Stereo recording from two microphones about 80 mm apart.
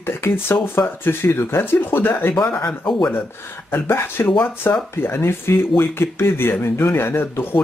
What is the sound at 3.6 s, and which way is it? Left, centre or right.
Speech, left.